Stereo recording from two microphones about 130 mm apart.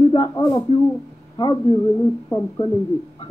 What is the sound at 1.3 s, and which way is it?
Speech, 35° left (ahead or behind).